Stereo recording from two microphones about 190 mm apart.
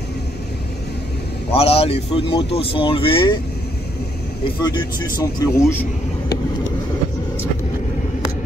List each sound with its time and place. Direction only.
1.5 s speech: 30° left (ahead or behind)
4.7 s speech: 20° left (ahead or behind)